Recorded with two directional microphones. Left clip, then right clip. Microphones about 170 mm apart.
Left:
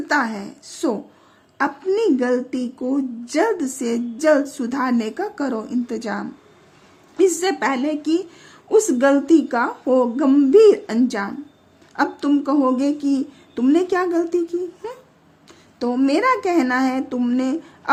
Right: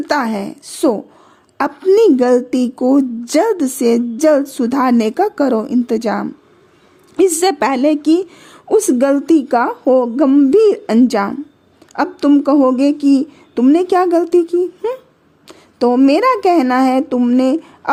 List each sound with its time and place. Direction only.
0.1 s a woman's voice: 40° right (ahead or behind)